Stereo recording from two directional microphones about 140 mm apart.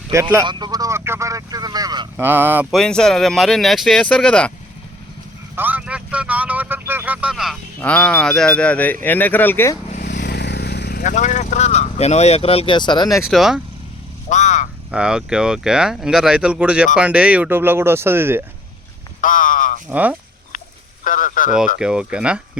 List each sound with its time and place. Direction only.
0.1 s speech: 20° right (ahead or behind)
2.1 s speech: 15° right (ahead or behind)
2.6 s speech: 5° left (ahead or behind)
5.5 s vehicle: 10° right (ahead or behind)
7.8 s speech: 10° left (ahead or behind)
10.9 s speech: 65° left (ahead or behind); by 13.2 s 30° left (ahead or behind)
13.2 s speech: 5° right (ahead or behind)
14.3 s vehicle: 60° left (ahead or behind)
14.8 s speech: 5° right (ahead or behind)
19.2 s a sound: 70° left (ahead or behind)
19.9 s speech: 10° right (ahead or behind)
21.0 s a sound: 70° left (ahead or behind)
21.8 s speech: 5° right (ahead or behind)